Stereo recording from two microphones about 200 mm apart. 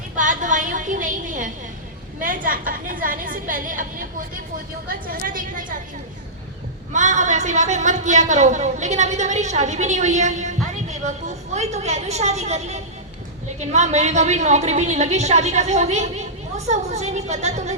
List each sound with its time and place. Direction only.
0.2 s a sound: 40° right (ahead or behind)
2.2 s a woman's voice: 40° right (ahead or behind)
6.9 s a woman's voice: 40° right (ahead or behind)